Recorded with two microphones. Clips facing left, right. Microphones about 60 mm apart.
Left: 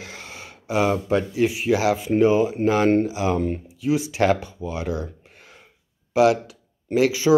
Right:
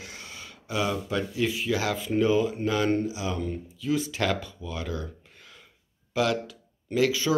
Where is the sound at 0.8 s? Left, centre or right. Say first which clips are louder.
Left 8 dB; left.